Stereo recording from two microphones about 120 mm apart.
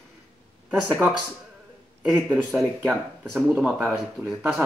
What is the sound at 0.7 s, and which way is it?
Speech, 10° right (ahead or behind).